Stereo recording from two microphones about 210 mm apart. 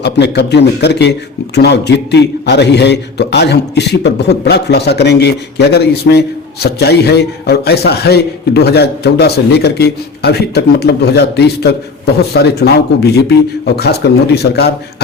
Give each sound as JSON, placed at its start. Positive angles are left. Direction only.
{"t": 0.0, "sound": "a man's voice", "side_deg": 55}